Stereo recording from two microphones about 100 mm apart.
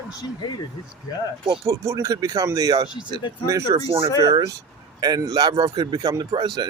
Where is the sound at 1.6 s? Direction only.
30° right (ahead or behind).